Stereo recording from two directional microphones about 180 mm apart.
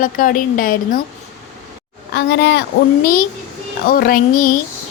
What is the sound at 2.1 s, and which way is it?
A woman's voice, 70° left (ahead or behind).